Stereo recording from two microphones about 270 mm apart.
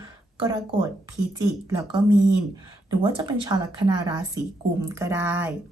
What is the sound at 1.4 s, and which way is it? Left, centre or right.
Speech, centre.